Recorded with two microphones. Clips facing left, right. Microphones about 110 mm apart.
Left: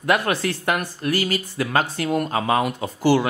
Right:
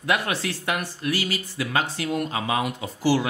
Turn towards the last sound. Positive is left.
turn(degrees=60)  # may be behind; listen again after turning